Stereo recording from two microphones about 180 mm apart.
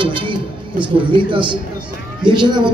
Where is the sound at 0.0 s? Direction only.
25° right (ahead or behind).